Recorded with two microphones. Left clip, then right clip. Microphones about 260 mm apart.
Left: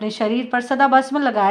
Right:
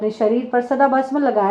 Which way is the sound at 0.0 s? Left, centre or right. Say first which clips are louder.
Right 4 dB; left.